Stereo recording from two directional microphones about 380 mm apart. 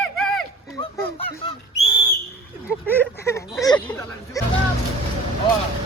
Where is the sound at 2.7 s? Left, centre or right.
Centre.